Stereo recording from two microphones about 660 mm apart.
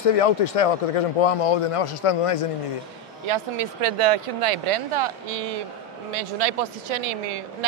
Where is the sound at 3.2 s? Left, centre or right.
Right.